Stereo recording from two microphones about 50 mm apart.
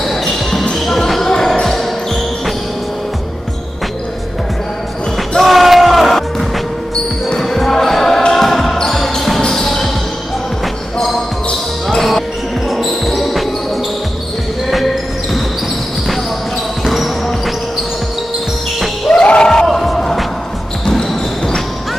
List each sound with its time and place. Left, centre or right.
0.0 s basketball bounce: centre
5.4 s crowd: centre
7.2 s basketball bounce: centre
9.4 s a sound: centre
11.9 s basketball bounce: centre
14.7 s basketball bounce: centre
16.8 s basketball bounce: centre
19.2 s a sound: centre
19.6 s music: centre
20.8 s basketball bounce: centre